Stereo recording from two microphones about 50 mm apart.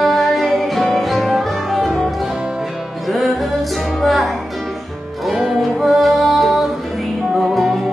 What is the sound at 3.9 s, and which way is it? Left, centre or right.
Music, centre.